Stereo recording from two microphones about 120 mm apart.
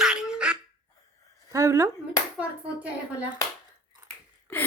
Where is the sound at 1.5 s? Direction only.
25° right (ahead or behind).